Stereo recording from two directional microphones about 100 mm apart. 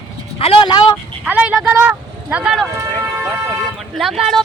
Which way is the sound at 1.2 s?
15° right (ahead or behind).